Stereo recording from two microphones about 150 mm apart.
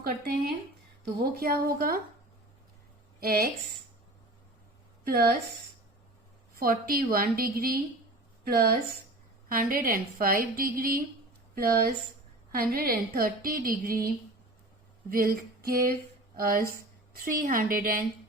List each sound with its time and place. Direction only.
1.0 s a woman's voice: 90° right
3.2 s a woman's voice: 90° right
5.0 s speech: 90° right
6.6 s a woman's voice: 75° right (ahead or behind)
9.5 s a woman's voice: 70° right (ahead or behind)
11.5 s a woman's voice: 90° right; by 13.9 s 70° right (ahead or behind)
15.1 s a sound: 80° right
17.2 s a woman's voice: 70° right (ahead or behind)